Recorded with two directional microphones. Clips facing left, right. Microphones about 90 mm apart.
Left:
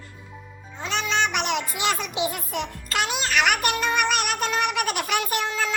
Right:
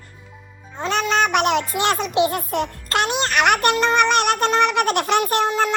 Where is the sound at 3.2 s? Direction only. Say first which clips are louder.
Right 4 dB; 50° right (ahead or behind).